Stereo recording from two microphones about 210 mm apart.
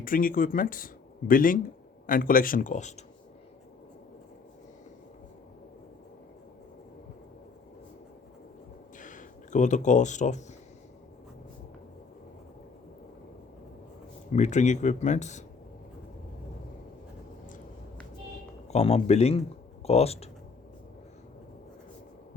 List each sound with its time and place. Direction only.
0.0 s speech: 40° left (ahead or behind)
9.0 s a sound: 40° left (ahead or behind)
14.3 s speech: 35° left (ahead or behind)
18.7 s speech: 30° left (ahead or behind)